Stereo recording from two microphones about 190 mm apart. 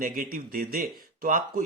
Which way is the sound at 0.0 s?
50° right (ahead or behind).